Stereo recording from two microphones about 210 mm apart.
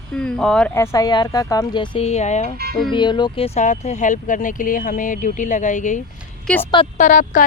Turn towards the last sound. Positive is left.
turn(degrees=35)  # may be behind; listen again after turning